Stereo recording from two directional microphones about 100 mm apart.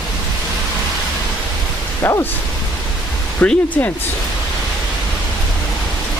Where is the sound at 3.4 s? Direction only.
15° left (ahead or behind).